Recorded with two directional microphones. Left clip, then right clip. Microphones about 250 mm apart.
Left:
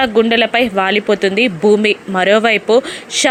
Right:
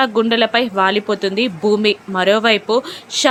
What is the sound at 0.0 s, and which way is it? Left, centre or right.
Speech, centre.